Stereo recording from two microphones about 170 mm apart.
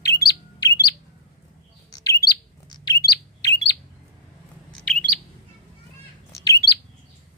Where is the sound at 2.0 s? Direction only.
20° left (ahead or behind).